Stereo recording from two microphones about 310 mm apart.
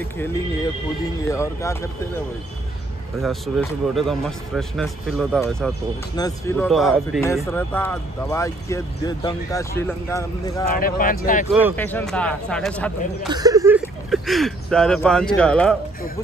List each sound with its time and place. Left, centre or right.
1.3 s speech: centre
3.2 s speech: centre
10.7 s speech: left
11.7 s speech: centre
13.3 s speech: centre